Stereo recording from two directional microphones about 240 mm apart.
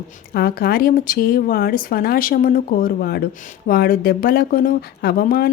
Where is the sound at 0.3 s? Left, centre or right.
Left.